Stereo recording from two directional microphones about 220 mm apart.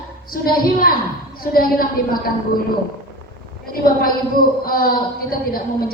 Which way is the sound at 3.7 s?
40° left (ahead or behind).